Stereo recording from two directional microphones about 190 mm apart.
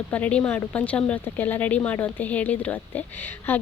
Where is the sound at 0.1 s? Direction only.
5° left (ahead or behind).